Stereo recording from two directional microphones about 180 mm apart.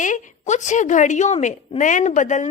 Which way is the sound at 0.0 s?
45° left (ahead or behind).